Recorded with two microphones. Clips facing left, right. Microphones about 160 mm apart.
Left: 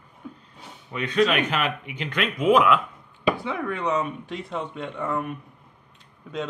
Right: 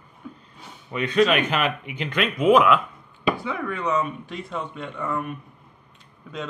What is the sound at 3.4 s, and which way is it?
A man's voice, 25° left (ahead or behind).